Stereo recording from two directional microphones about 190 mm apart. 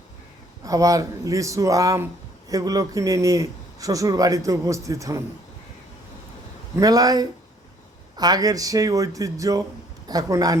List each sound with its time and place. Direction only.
0.6 s a man's voice: 15° right (ahead or behind)
6.7 s speech: 20° right (ahead or behind)